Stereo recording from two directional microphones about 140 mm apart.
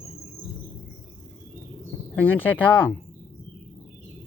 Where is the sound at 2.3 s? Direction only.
10° left (ahead or behind).